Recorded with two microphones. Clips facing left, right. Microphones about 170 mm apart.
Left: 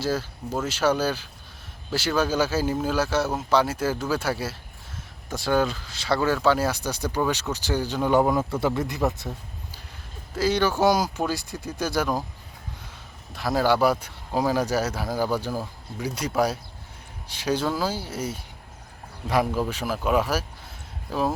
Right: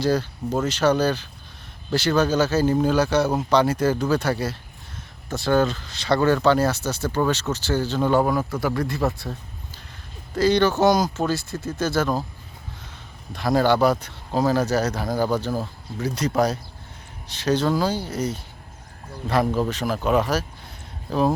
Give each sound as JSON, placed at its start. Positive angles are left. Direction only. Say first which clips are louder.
{"t": 0.0, "sound": "speech", "louder": "right 5 dB", "side_deg": 5}
{"t": 10.3, "sound": "speech", "louder": "right 4 dB", "side_deg": 5}
{"t": 13.3, "sound": "speech", "louder": "right 3 dB", "side_deg": 5}